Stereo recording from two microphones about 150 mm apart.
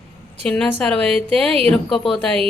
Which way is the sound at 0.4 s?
10° left (ahead or behind).